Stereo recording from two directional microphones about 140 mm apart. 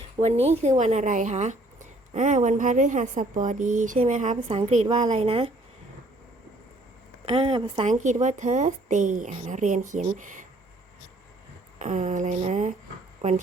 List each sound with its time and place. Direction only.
0.2 s a woman's voice: 50° right (ahead or behind)
7.3 s speech: 40° right (ahead or behind)
7.9 s speech: 60° right (ahead or behind)
11.8 s a woman's voice: 60° right (ahead or behind)